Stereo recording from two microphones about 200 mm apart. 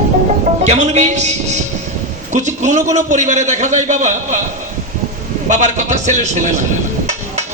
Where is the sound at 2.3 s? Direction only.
35° right (ahead or behind).